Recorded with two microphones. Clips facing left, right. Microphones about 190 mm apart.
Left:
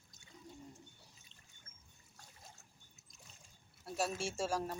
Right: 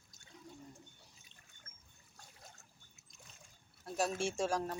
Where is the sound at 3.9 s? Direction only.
5° left (ahead or behind).